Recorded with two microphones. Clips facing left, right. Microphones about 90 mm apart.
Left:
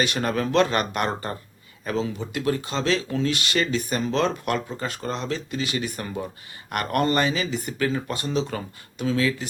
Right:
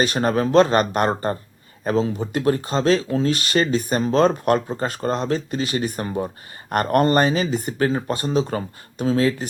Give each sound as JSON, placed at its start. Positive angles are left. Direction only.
{"t": 0.0, "sound": "speech", "side_deg": -35}